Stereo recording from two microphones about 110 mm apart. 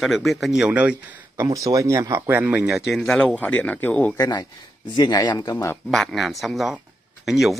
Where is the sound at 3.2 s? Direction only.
10° left (ahead or behind).